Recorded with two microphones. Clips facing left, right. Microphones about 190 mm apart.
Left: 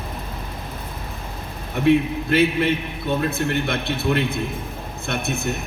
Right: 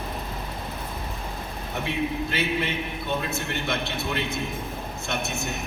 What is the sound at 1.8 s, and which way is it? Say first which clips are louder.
A man's voice: left 11 dB; 55° left (ahead or behind).